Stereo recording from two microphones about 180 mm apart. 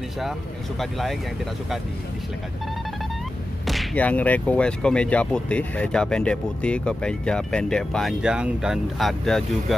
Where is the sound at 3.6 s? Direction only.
Centre (ahead or behind).